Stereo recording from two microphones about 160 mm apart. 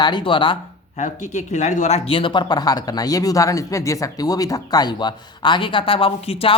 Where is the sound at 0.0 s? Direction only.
30° left (ahead or behind).